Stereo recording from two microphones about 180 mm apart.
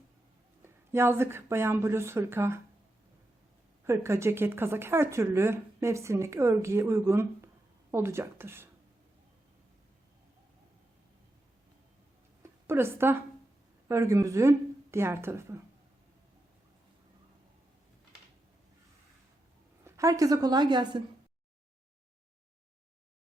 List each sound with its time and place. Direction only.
0.9 s speech: 15° right (ahead or behind)
3.8 s speech: 15° right (ahead or behind)
12.4 s a woman's voice: 15° right (ahead or behind)
19.8 s a woman's voice: 15° right (ahead or behind)